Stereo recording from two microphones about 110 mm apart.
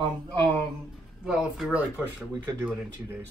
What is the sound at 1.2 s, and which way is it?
Speech, 5° right (ahead or behind).